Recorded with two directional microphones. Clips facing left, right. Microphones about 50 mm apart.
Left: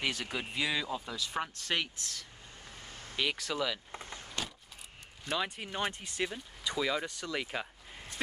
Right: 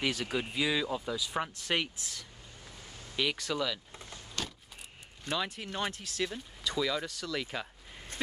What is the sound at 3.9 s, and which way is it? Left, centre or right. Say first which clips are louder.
Power windows: left 4 dB; left.